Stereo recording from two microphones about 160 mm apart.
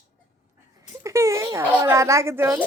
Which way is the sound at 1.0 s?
20° right (ahead or behind).